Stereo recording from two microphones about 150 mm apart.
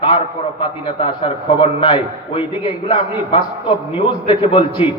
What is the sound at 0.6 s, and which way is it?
A man's voice, 35° left (ahead or behind).